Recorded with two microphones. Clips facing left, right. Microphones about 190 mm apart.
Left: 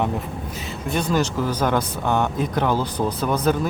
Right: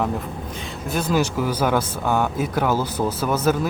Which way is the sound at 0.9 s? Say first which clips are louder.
Even; 5° right (ahead or behind).